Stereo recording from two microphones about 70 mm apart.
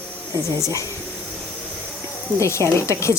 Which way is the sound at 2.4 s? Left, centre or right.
Left.